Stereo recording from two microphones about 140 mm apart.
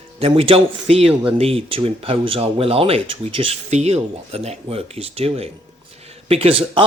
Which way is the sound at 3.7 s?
50° right (ahead or behind).